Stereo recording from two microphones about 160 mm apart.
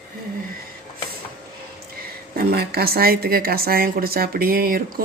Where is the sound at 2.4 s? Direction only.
75° right (ahead or behind).